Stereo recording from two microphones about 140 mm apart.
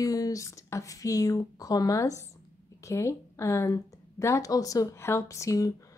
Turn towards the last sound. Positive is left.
turn(degrees=25)  # may be behind; listen again after turning